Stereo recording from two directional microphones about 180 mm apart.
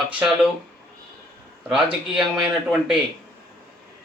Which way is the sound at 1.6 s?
5° right (ahead or behind).